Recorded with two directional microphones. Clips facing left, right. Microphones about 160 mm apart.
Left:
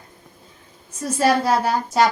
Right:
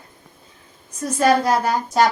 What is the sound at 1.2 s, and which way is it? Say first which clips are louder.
Speech: right 1 dB; 5° left (ahead or behind).